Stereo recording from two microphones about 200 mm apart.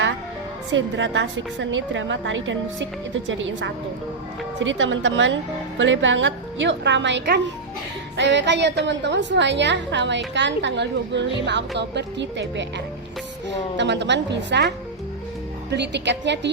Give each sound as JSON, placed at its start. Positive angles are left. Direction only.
{"t": 0.7, "sound": "a woman's voice", "side_deg": -70}
{"t": 15.7, "sound": "a woman's voice", "side_deg": -60}